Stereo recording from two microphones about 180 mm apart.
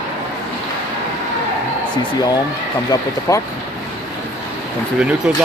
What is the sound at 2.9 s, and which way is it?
Speech, 15° left (ahead or behind).